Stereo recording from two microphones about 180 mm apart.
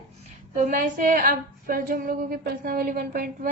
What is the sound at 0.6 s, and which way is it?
A woman's voice, 50° right (ahead or behind).